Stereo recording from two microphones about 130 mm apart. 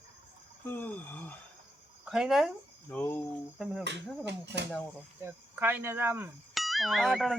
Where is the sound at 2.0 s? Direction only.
5° right (ahead or behind).